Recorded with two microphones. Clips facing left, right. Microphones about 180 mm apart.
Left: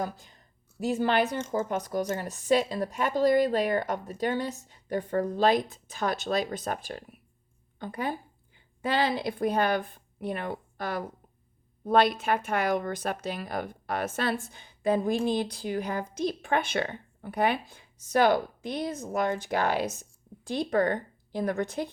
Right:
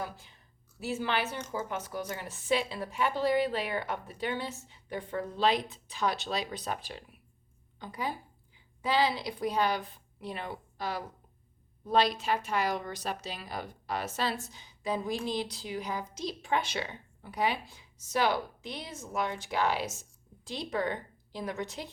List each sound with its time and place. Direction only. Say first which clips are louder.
0.0 s a woman's voice: left 6 dB; 45° left (ahead or behind)